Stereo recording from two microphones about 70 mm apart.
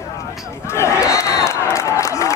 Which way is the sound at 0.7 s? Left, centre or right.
Left.